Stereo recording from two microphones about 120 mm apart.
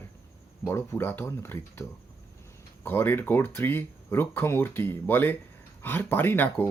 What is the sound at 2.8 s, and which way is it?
Speech, 20° left (ahead or behind).